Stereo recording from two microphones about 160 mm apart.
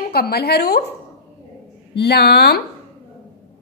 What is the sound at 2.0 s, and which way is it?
Speech, 90° left.